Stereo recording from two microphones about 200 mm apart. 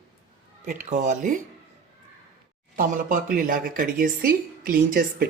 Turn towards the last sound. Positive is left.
turn(degrees=-45)  # may be behind; listen again after turning